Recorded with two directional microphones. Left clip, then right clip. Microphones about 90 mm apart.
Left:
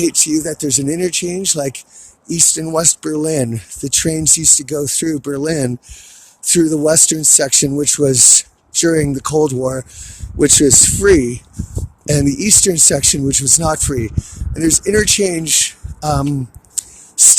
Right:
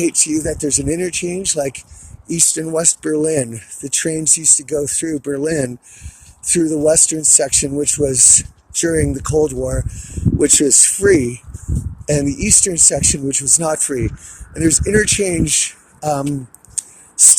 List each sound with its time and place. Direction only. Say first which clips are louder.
0.0 s speech: left 2 dB; 20° left (ahead or behind)
12.0 s speech: left 2 dB; 40° left (ahead or behind)
13.6 s speech: left 1 dB; 20° left (ahead or behind)